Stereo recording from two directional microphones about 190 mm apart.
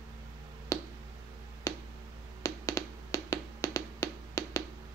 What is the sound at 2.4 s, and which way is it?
Tap, 20° left (ahead or behind).